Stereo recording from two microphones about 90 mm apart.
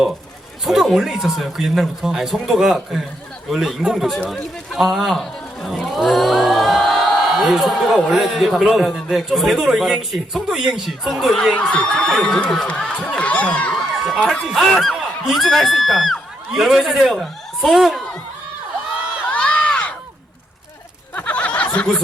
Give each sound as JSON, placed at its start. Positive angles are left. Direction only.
{"t": 0.6, "sound": "a man's voice", "side_deg": 0}
{"t": 11.5, "sound": "a man's voice", "side_deg": 15}
{"t": 19.3, "sound": "crowd", "side_deg": 15}
{"t": 21.2, "sound": "a sound", "side_deg": 15}